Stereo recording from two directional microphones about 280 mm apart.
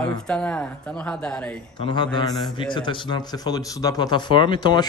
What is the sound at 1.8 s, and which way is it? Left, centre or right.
Speech, centre.